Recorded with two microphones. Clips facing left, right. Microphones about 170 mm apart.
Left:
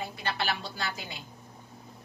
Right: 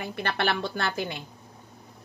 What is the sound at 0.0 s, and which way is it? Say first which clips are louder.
A woman's voice: right 4 dB; 65° right (ahead or behind).